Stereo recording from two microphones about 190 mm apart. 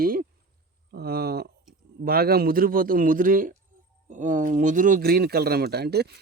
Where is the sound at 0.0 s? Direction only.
50° right (ahead or behind).